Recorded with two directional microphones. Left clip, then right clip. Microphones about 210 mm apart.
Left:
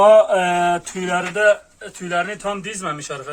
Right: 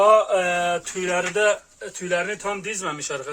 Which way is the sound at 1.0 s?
Centre (ahead or behind).